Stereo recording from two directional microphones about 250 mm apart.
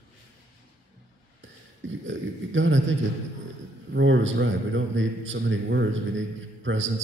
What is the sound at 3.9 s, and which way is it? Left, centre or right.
A man's voice, right.